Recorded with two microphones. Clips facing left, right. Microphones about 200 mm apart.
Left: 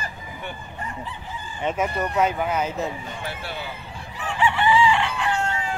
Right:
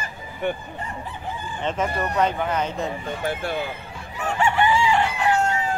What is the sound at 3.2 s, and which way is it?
Speech, 50° right (ahead or behind).